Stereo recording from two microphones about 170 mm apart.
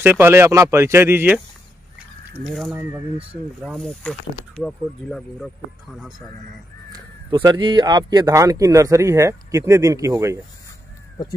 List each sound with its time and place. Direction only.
0.0 s speech: 10° right (ahead or behind)
2.4 s speech: centre (ahead or behind)
6.9 s speech: 25° right (ahead or behind)